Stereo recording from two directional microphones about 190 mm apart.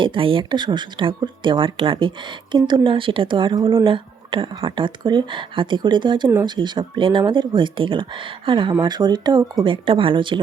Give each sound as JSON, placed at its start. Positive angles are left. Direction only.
{"t": 0.0, "sound": "speech", "side_deg": -25}